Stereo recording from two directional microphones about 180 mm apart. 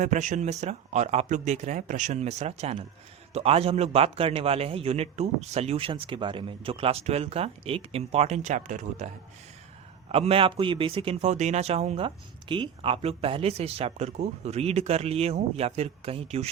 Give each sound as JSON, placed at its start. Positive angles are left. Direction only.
{"t": 0.0, "sound": "speech", "side_deg": -45}
{"t": 10.1, "sound": "speech", "side_deg": -35}